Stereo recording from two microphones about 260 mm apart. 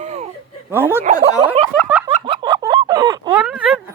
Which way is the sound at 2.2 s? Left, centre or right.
Centre.